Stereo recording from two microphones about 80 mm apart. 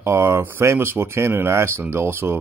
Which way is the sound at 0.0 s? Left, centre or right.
Right.